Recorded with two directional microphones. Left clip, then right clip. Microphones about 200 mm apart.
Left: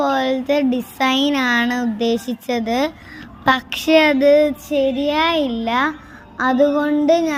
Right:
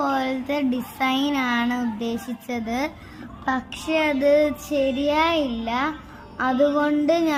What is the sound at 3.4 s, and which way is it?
A woman's voice, 35° left (ahead or behind).